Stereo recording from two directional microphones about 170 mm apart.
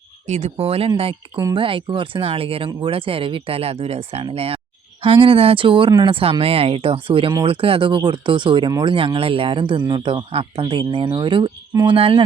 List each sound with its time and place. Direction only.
0.3 s speech: 40° right (ahead or behind)